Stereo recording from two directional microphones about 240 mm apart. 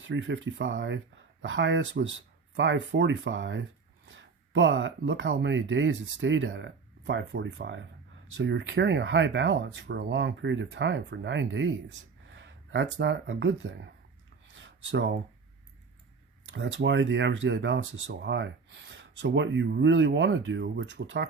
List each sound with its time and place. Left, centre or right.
0.0 s speech: right
14.5 s a sound: right
16.5 s speech: right